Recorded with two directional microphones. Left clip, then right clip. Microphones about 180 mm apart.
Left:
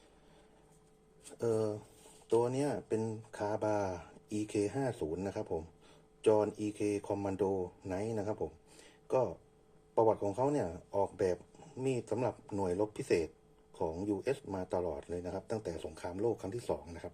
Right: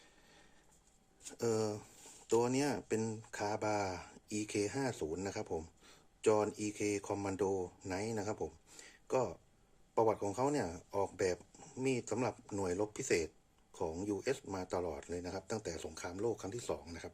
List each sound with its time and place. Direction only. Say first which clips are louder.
1.4 s speech: left 2 dB; 20° right (ahead or behind)